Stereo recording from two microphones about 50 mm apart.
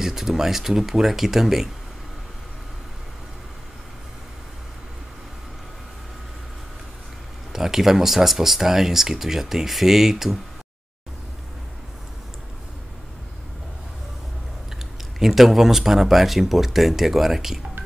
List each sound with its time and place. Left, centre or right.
0.0 s speech: centre
7.5 s speech: centre
15.1 s speech: centre